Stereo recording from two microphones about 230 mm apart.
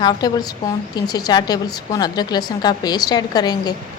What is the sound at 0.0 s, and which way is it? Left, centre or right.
A woman's voice, centre.